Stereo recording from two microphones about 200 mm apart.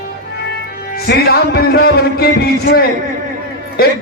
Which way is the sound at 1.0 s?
50° left (ahead or behind).